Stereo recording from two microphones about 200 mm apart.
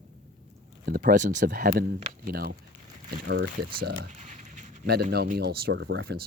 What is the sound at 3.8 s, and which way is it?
Speech, 45° right (ahead or behind).